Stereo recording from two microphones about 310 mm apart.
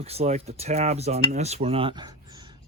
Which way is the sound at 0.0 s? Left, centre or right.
Centre.